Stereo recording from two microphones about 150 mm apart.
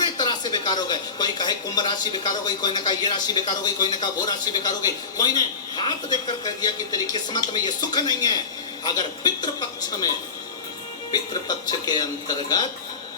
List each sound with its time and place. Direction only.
0.0 s a man's voice: 30° left (ahead or behind)
11.1 s a man's voice: 25° left (ahead or behind)